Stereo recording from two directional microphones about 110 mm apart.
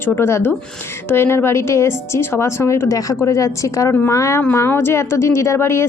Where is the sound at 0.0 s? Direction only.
20° left (ahead or behind).